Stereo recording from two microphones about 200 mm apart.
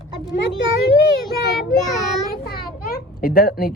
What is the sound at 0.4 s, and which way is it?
Speech, 60° left (ahead or behind).